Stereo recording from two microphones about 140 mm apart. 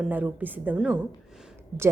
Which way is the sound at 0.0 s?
10° right (ahead or behind).